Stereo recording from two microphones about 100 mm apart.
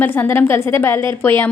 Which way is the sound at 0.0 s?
20° left (ahead or behind).